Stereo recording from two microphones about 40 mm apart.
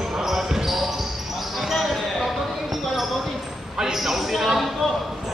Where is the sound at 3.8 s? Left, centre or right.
Centre.